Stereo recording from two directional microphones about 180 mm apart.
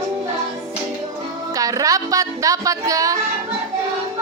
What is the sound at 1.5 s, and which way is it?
Speech, 20° right (ahead or behind).